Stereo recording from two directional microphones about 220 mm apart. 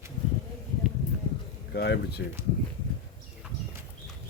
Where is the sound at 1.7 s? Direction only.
50° left (ahead or behind).